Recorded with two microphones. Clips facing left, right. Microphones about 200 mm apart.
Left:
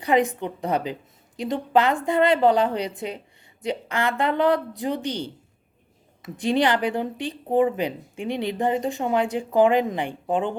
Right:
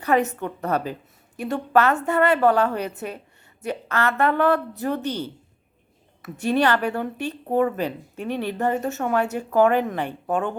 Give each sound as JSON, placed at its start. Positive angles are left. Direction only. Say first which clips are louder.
{"t": 0.0, "sound": "speech", "louder": "even", "side_deg": 15}